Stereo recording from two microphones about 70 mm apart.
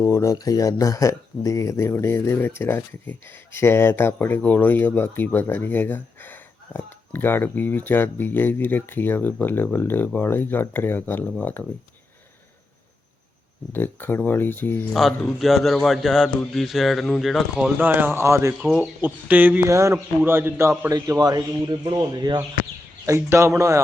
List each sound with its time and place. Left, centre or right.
0.0 s speech: left
13.7 s speech: left
14.9 s a man's voice: centre
17.7 s a man's voice: right
18.8 s speech: right
19.6 s a man's voice: right
20.9 s speech: right
22.1 s speech: right
23.0 s a man's voice: right